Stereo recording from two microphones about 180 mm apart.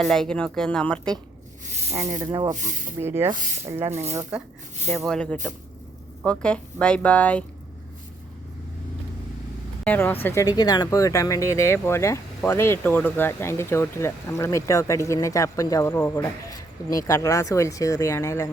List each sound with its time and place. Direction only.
0.0 s speech: centre (ahead or behind)
1.7 s snake: 35° right (ahead or behind)
2.0 s speech: 20° right (ahead or behind)
2.5 s speech: 45° right (ahead or behind)
3.0 s speech: 15° right (ahead or behind)
4.9 s speech: 5° left (ahead or behind)
9.8 s speech: 10° left (ahead or behind)